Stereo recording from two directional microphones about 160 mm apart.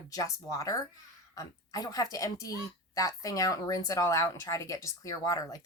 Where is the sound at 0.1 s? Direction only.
20° left (ahead or behind).